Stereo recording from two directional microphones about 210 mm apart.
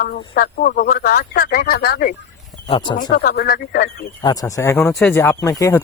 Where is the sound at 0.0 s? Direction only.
45° left (ahead or behind).